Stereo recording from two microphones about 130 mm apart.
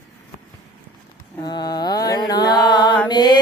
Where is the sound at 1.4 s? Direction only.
35° left (ahead or behind).